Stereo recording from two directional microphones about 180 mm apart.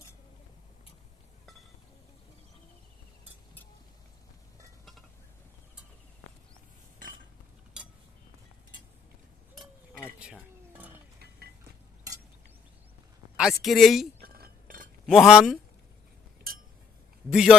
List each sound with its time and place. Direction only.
10.2 s a sound: 5° right (ahead or behind)
13.3 s speech: centre (ahead or behind)
14.2 s chink: 55° right (ahead or behind)
15.0 s speech: centre (ahead or behind)
17.2 s a man's voice: 5° right (ahead or behind)